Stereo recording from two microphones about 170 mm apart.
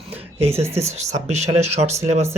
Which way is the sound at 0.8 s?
40° right (ahead or behind).